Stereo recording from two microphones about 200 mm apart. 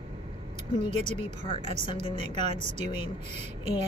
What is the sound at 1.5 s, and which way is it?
Speech, 35° right (ahead or behind).